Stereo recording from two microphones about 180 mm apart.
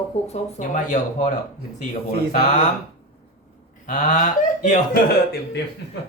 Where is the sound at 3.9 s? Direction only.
40° left (ahead or behind).